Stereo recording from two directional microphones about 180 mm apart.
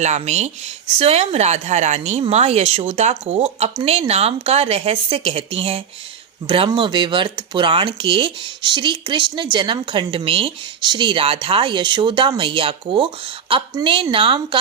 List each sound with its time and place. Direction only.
0.0 s speech: 40° right (ahead or behind)